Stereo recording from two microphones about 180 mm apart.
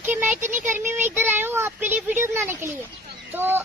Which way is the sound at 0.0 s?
10° right (ahead or behind).